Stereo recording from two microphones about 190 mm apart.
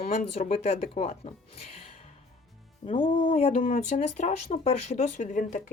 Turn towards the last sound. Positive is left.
turn(degrees=40)  # may be behind; listen again after turning